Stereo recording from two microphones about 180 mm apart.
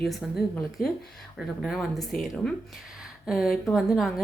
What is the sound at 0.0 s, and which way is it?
A woman's voice, centre (ahead or behind).